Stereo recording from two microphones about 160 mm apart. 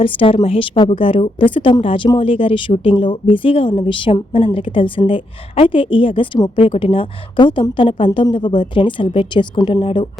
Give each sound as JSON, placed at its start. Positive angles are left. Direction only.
{"t": 0.0, "sound": "a woman's voice", "side_deg": 35}